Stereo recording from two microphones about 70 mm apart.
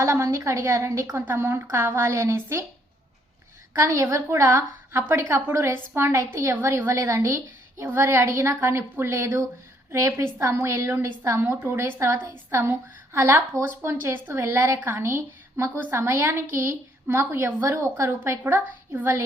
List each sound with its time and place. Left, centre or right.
0.1 s a woman's voice: right
3.8 s a woman's voice: right
11.3 s a woman's voice: right
14.3 s a woman's voice: right